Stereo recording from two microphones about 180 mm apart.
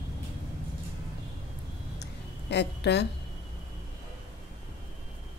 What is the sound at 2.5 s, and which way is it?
Speech, 70° left (ahead or behind).